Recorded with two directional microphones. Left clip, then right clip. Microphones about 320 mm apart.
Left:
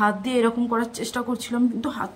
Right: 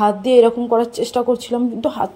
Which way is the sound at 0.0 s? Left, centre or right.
Centre.